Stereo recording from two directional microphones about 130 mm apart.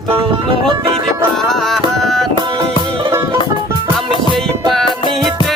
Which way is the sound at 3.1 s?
20° right (ahead or behind).